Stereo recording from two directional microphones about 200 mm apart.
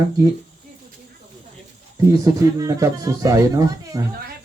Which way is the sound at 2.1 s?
15° right (ahead or behind).